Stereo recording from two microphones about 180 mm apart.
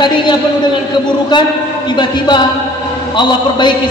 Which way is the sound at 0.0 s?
25° left (ahead or behind).